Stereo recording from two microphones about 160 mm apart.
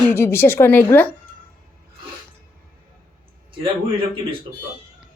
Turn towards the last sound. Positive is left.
turn(degrees=-30)  # may be behind; listen again after turning